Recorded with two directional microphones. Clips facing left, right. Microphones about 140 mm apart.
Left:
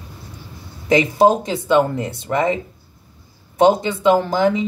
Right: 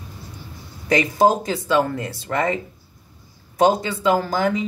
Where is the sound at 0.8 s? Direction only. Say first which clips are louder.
Left 3 dB; 25° left (ahead or behind).